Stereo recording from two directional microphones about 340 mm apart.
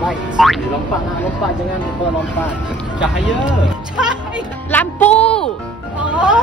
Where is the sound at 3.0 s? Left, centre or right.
Centre.